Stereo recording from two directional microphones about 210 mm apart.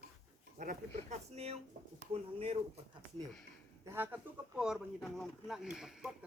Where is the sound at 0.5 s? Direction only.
40° right (ahead or behind).